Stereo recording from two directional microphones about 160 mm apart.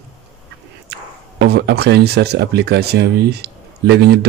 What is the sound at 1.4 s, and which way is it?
Speech, 90° right.